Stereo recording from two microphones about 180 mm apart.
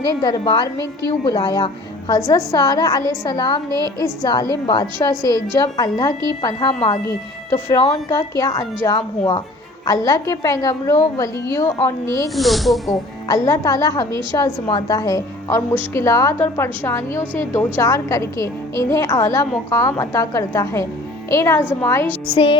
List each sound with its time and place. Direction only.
0.2 s a woman's voice: 25° left (ahead or behind)
5.2 s a woman's voice: 25° right (ahead or behind)
5.5 s a woman's voice: 20° left (ahead or behind)
12.4 s speech: centre (ahead or behind)
12.9 s a woman's voice: 20° left (ahead or behind)